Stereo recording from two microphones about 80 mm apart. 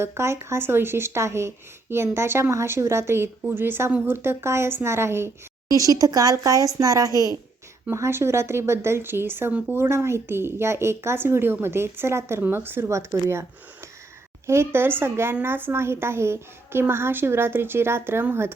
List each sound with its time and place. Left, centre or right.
0.0 s speech: right
5.7 s a woman's voice: right
7.9 s speech: right
9.5 s speech: centre
9.7 s speech: right
14.4 s speech: right